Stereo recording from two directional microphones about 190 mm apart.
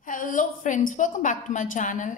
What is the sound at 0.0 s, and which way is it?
A woman's voice, 45° left (ahead or behind).